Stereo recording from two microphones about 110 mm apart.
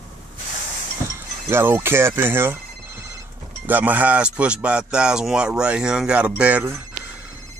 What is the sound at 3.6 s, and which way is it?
Speech, 15° right (ahead or behind).